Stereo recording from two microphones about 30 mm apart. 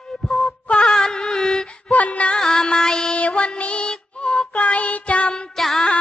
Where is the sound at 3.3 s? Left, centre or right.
Left.